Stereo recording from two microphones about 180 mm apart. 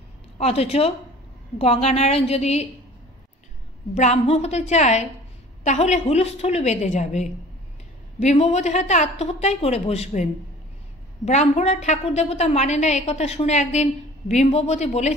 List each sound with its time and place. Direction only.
0.4 s a woman's voice: 35° left (ahead or behind)
3.9 s a woman's voice: 40° left (ahead or behind)